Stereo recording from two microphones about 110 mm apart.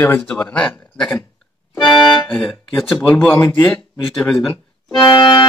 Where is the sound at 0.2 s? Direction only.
10° left (ahead or behind).